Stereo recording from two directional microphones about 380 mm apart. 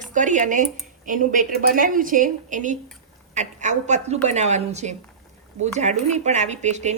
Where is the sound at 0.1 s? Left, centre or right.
Centre.